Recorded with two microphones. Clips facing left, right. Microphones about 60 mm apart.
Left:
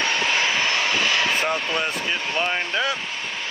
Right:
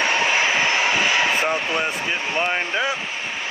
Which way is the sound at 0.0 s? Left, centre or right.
Centre.